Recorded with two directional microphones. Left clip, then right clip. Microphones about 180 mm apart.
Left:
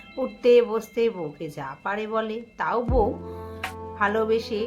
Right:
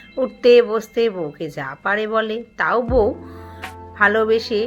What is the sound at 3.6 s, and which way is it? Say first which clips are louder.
Music: even; centre (ahead or behind).